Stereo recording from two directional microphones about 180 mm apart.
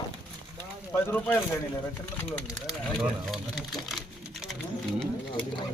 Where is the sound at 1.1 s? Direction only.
10° left (ahead or behind).